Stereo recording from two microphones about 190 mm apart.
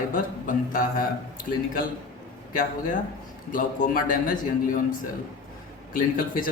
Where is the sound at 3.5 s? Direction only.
45° left (ahead or behind).